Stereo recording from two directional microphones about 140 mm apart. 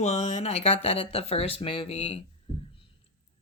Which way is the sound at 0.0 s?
55° left (ahead or behind).